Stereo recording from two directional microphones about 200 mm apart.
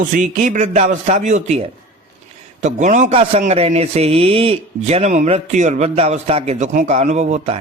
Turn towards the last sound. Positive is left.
turn(degrees=-35)  # may be behind; listen again after turning